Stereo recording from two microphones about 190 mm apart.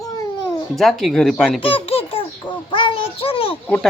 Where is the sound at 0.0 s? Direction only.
20° left (ahead or behind).